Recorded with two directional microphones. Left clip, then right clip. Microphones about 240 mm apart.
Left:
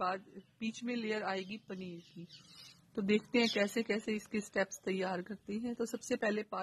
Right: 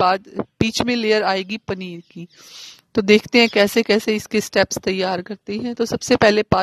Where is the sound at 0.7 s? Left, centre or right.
Right.